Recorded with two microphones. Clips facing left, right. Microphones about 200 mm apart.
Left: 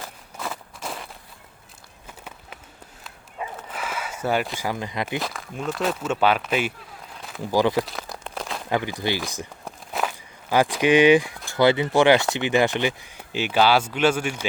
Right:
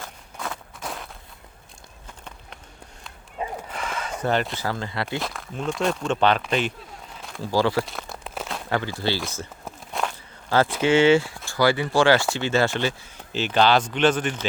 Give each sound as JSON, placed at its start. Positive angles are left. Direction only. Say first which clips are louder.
{"t": 0.0, "sound": "walk", "louder": "left 1 dB", "side_deg": 5}
{"t": 3.7, "sound": "a sound", "louder": "right 1 dB", "side_deg": 5}
{"t": 5.2, "sound": "speech", "louder": "even", "side_deg": 0}
{"t": 7.2, "sound": "a sound", "louder": "left 1 dB", "side_deg": 0}
{"t": 7.4, "sound": "speech", "louder": "left 1 dB", "side_deg": 15}
{"t": 7.9, "sound": "crumpling", "louder": "left 1 dB", "side_deg": 0}
{"t": 8.7, "sound": "speech", "louder": "left 1 dB", "side_deg": 15}
{"t": 9.6, "sound": "walk", "louder": "left 1 dB", "side_deg": 5}
{"t": 11.4, "sound": "speech", "louder": "left 2 dB", "side_deg": 20}